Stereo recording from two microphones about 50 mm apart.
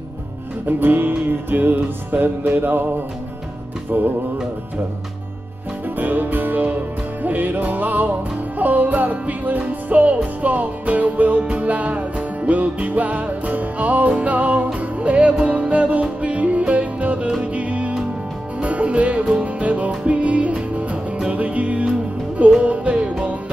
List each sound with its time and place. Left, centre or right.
0.7 s music: right
5.9 s music: right